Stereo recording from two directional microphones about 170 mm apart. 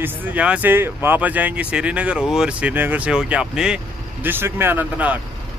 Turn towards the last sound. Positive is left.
turn(degrees=-10)  # may be behind; listen again after turning